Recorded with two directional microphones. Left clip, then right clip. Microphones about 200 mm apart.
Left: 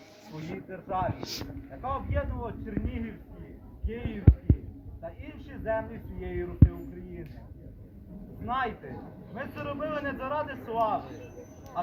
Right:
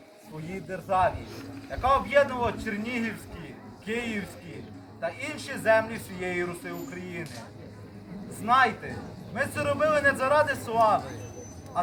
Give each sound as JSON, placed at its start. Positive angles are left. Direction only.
{"t": 0.7, "sound": "speech", "side_deg": -10}
{"t": 8.4, "sound": "speech", "side_deg": -10}